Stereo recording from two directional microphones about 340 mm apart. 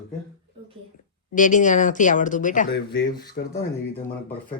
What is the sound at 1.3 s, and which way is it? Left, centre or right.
Speech, left.